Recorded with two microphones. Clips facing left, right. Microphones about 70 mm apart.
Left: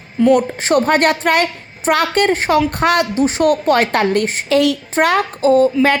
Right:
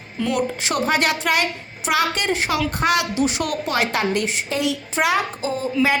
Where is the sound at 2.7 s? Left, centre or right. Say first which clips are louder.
Left 5 dB; left.